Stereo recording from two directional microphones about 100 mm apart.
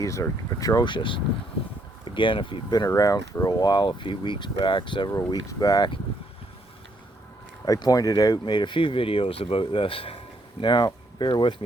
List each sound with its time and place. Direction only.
0.0 s speech: 30° left (ahead or behind)
0.9 s speech: 55° left (ahead or behind)
5.1 s speech: 35° left (ahead or behind)
7.6 s speech: 40° left (ahead or behind); by 10.2 s 65° left (ahead or behind)
10.6 s speech: 50° left (ahead or behind)